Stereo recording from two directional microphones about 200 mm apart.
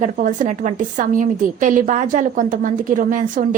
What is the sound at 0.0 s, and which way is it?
A woman's voice, 40° right (ahead or behind).